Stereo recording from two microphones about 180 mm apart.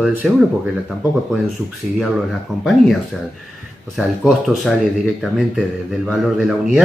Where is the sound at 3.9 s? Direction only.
Centre (ahead or behind).